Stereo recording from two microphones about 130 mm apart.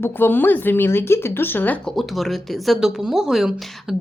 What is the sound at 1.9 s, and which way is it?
Speech, centre (ahead or behind).